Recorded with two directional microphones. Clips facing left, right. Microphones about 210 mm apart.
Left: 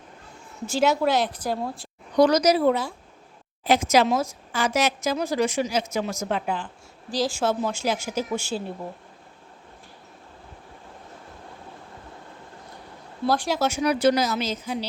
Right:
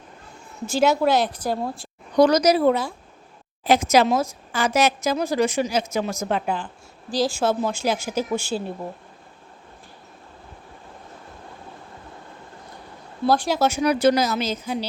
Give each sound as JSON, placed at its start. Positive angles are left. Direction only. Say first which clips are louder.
{"t": 0.7, "sound": "speech", "louder": "right 2 dB", "side_deg": -40}
{"t": 2.1, "sound": "a woman's voice", "louder": "right 2 dB", "side_deg": -45}
{"t": 7.1, "sound": "speech", "louder": "right 2 dB", "side_deg": -30}
{"t": 13.2, "sound": "speech", "louder": "right 3 dB", "side_deg": -30}